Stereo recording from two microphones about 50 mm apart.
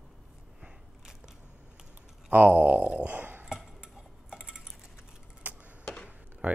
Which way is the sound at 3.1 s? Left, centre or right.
Right.